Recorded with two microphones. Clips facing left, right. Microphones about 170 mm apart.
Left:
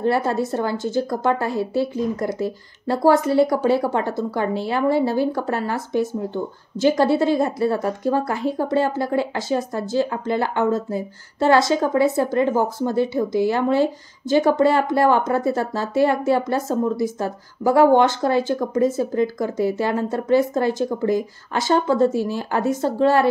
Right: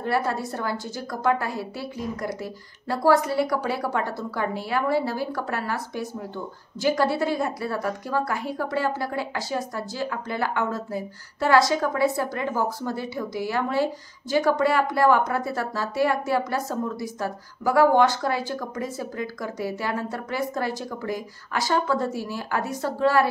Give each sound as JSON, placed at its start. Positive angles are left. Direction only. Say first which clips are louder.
{"t": 0.0, "sound": "a woman's voice", "louder": "left 5 dB", "side_deg": 25}